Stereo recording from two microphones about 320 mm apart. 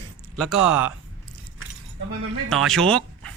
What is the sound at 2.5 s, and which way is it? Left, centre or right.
Speech, centre.